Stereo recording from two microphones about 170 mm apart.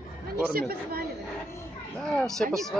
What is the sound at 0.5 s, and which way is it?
Speech, 60° right (ahead or behind).